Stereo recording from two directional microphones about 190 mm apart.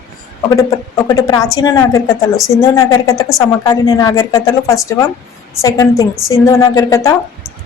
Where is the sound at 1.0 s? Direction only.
20° left (ahead or behind).